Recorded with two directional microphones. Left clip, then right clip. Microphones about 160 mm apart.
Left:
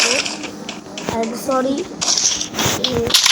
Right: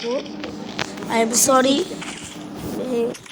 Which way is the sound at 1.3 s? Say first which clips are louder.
Right 5 dB; 45° right (ahead or behind).